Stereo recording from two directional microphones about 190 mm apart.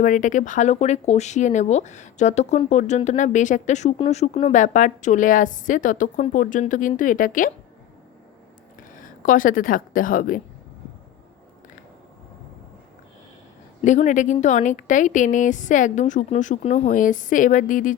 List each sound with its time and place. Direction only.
0.0 s a woman's voice: 40° left (ahead or behind)
9.0 s a woman's voice: 45° left (ahead or behind)
13.8 s speech: 40° left (ahead or behind)